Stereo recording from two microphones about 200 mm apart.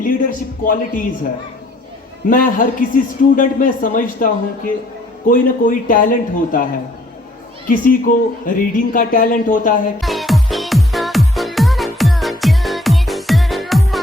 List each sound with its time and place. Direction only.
0.0 s a man's voice: 45° left (ahead or behind)
2.3 s a man's voice: 45° left (ahead or behind)
7.7 s a man's voice: 45° left (ahead or behind)
10.0 s music: centre (ahead or behind)